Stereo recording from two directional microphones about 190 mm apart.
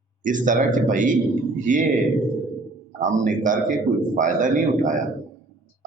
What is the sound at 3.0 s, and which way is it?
A man's voice, 45° right (ahead or behind).